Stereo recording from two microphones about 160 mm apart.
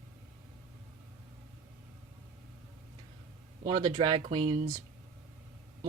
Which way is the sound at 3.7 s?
25° right (ahead or behind).